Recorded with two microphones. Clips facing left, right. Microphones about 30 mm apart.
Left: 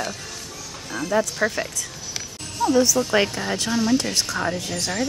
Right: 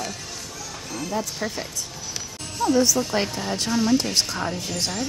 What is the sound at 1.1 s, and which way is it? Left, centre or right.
Speech, left.